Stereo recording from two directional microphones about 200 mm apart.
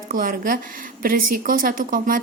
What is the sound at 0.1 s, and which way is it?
A woman's voice, 45° right (ahead or behind).